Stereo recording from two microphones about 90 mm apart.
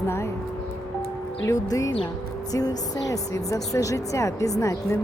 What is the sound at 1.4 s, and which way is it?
A woman's voice, 40° left (ahead or behind).